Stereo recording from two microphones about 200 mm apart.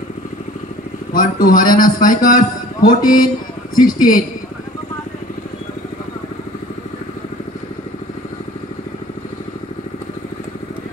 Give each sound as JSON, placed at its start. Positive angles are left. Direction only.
{"t": 1.1, "sound": "a man's voice", "side_deg": 45}
{"t": 3.0, "sound": "a woman's voice", "side_deg": 20}